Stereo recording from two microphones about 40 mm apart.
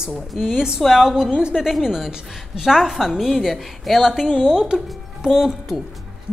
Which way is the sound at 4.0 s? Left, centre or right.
Centre.